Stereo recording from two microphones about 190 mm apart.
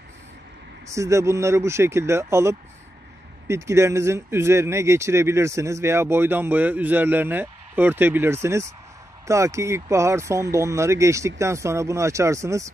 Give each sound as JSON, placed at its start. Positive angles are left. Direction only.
{"t": 0.9, "sound": "speech", "side_deg": -15}